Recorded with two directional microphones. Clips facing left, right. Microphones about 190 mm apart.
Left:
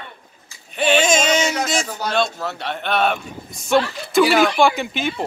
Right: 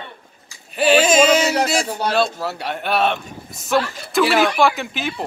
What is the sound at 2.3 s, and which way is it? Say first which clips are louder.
Speech: right 1 dB; 10° right (ahead or behind).